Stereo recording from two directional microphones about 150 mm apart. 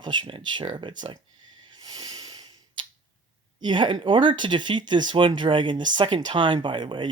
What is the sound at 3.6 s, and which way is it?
Speech, 35° right (ahead or behind).